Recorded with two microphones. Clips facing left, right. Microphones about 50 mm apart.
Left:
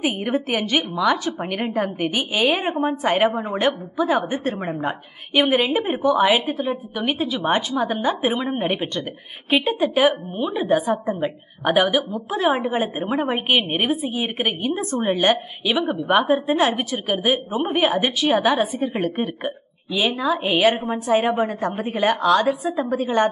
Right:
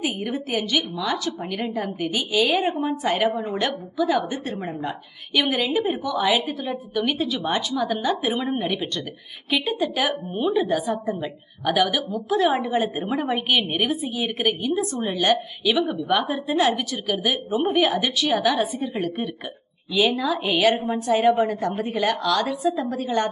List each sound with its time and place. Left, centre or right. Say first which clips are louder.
0.0 s a woman's voice: left 4 dB; left
10.4 s speech: right 3 dB; centre
10.7 s a woman's voice: left 4 dB; left
19.9 s speech: right 1 dB; centre
20.2 s a woman's voice: left 2 dB; centre
20.7 s a woman's voice: even; left